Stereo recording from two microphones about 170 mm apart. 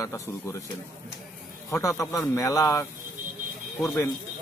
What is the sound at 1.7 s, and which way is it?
Speech, 15° left (ahead or behind).